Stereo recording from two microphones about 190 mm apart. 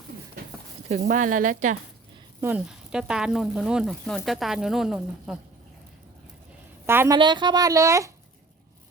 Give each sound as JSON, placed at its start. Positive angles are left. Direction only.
{"t": 1.0, "sound": "speech", "side_deg": -45}
{"t": 2.4, "sound": "speech", "side_deg": -10}
{"t": 6.8, "sound": "a woman's voice", "side_deg": -15}
{"t": 7.2, "sound": "speech", "side_deg": -25}